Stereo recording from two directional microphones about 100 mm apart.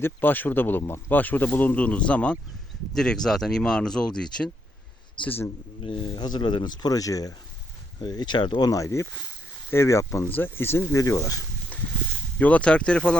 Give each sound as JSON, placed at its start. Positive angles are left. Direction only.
{"t": 0.0, "sound": "speech", "side_deg": 20}
{"t": 5.2, "sound": "speech", "side_deg": 20}
{"t": 5.8, "sound": "speech", "side_deg": 55}
{"t": 8.7, "sound": "speech", "side_deg": 30}
{"t": 11.7, "sound": "a sound", "side_deg": 15}
{"t": 12.4, "sound": "speech", "side_deg": 15}